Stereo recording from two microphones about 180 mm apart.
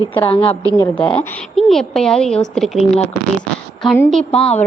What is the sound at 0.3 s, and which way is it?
Speech, 30° left (ahead or behind).